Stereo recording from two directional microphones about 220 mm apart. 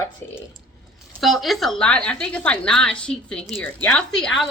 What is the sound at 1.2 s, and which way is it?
A woman's voice, centre (ahead or behind).